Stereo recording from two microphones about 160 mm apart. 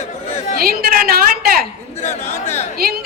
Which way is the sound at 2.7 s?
70° right (ahead or behind).